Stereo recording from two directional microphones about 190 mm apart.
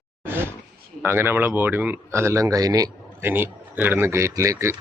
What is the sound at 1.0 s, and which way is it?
Speech, 15° right (ahead or behind).